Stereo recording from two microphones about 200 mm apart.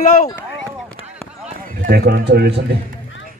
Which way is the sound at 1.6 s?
50° right (ahead or behind).